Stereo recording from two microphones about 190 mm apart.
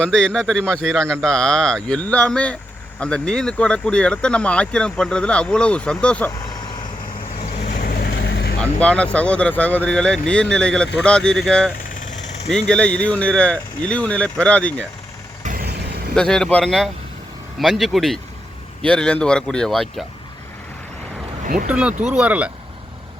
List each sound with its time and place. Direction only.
0.0 s speech: 5° left (ahead or behind)
7.7 s vehicle: 50° left (ahead or behind)
8.8 s speech: 5° left (ahead or behind)
15.4 s vehicle: 55° right (ahead or behind)
16.1 s speech: 5° left (ahead or behind)
21.7 s speech: 5° right (ahead or behind)